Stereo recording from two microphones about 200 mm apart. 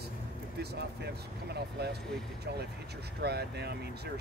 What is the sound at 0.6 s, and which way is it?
Speech, 55° right (ahead or behind).